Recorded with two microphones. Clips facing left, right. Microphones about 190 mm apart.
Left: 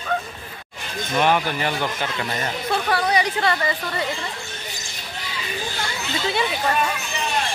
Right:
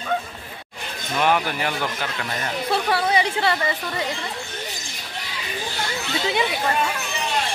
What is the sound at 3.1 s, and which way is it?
Speech, 25° right (ahead or behind).